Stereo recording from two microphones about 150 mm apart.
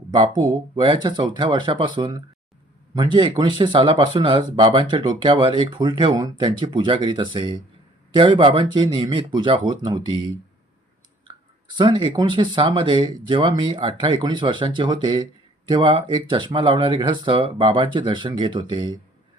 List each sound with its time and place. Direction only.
0.8 s speech: 30° right (ahead or behind)
11.7 s speech: 30° right (ahead or behind)